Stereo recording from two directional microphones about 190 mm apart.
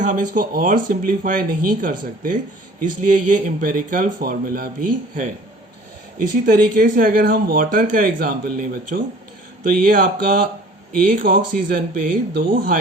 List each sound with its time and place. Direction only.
0.0 s speech: 40° right (ahead or behind)